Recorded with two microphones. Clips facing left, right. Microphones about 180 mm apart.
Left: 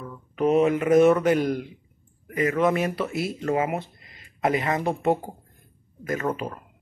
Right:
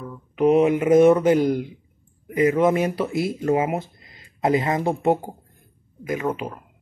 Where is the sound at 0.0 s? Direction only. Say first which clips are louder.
Right 4 dB; 10° right (ahead or behind).